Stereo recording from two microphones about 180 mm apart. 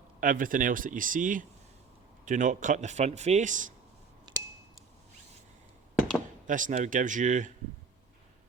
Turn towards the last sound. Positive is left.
turn(degrees=-45)  # may be behind; listen again after turning